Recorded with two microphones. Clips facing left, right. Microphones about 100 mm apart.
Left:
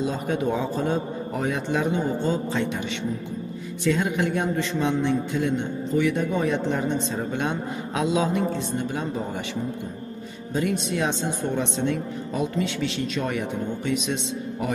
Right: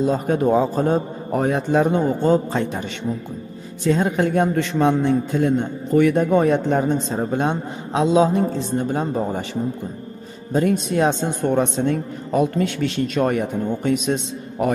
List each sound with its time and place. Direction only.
0.0 s a man's voice: 45° right (ahead or behind)
4.6 s a man's voice: 55° right (ahead or behind)